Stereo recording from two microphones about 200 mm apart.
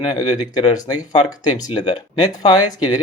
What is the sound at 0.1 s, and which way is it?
Speech, 20° left (ahead or behind).